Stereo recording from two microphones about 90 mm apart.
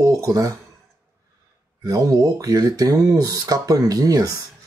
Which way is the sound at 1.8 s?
40° right (ahead or behind).